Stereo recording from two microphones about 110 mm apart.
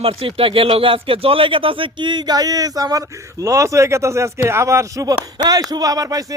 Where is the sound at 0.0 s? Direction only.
60° right (ahead or behind).